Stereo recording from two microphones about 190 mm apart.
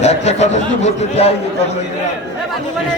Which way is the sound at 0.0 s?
35° left (ahead or behind).